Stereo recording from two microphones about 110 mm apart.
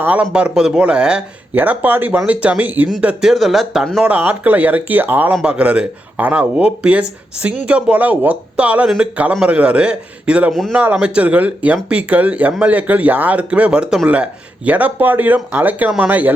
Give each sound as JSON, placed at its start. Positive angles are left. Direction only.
{"t": 0.0, "sound": "speech", "side_deg": -10}
{"t": 4.0, "sound": "speech", "side_deg": -15}
{"t": 10.5, "sound": "speech", "side_deg": 0}
{"t": 10.9, "sound": "speech", "side_deg": -10}